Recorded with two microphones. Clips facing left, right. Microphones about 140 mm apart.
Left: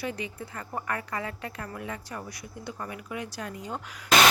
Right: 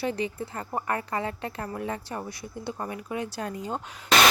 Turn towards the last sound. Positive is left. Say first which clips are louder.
# right 4 dB
turn(degrees=-25)  # may be behind; listen again after turning